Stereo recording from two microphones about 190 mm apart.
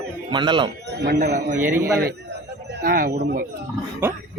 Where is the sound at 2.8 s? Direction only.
50° right (ahead or behind).